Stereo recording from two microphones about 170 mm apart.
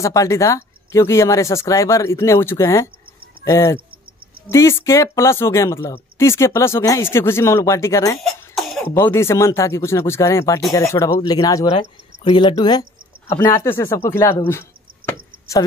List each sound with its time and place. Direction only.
0.0 s speech: 20° left (ahead or behind)
8.2 s cough: centre (ahead or behind)
8.8 s speech: 15° left (ahead or behind)